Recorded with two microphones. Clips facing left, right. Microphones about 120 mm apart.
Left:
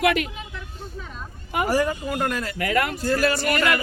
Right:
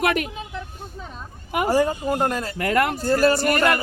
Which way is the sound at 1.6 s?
25° right (ahead or behind).